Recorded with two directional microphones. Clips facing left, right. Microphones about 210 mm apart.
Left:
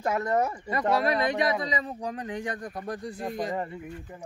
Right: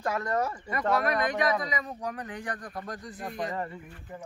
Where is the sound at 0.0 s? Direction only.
20° left (ahead or behind).